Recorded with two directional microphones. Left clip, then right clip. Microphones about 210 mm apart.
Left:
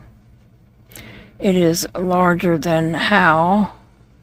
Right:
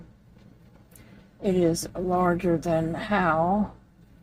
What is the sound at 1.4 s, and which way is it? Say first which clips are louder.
Speech: left 8 dB; 45° left (ahead or behind).